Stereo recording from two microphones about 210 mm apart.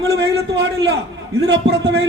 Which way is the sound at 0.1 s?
55° right (ahead or behind).